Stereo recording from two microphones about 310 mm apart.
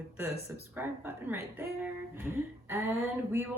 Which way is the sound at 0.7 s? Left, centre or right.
Centre.